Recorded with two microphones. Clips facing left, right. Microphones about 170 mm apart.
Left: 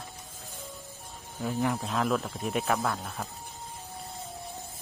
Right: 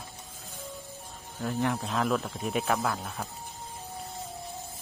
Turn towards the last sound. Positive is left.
turn(degrees=0)  # may be behind; listen again after turning